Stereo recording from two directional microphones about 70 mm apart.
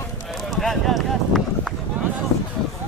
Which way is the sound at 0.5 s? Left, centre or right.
Centre.